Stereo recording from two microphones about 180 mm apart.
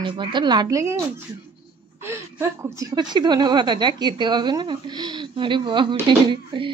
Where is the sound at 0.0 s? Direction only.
25° right (ahead or behind).